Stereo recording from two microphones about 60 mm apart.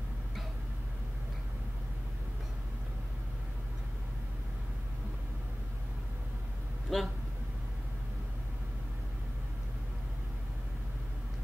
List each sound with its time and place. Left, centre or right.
6.9 s vehicle: centre